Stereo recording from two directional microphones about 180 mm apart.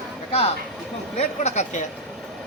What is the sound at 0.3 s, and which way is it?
Speech, 35° left (ahead or behind).